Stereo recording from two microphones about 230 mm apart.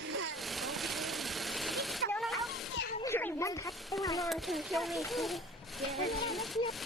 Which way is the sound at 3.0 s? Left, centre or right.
Centre.